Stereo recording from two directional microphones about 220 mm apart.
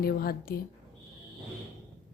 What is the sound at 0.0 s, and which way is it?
Speech, 45° left (ahead or behind).